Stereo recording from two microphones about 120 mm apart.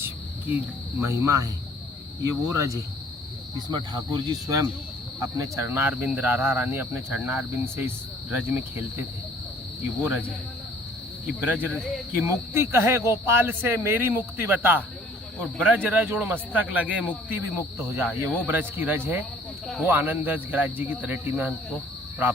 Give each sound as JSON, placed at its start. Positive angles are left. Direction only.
{"t": 0.0, "sound": "cricket", "side_deg": -15}
{"t": 1.1, "sound": "speech", "side_deg": -25}
{"t": 10.0, "sound": "speech", "side_deg": -15}
{"t": 11.3, "sound": "speech", "side_deg": -15}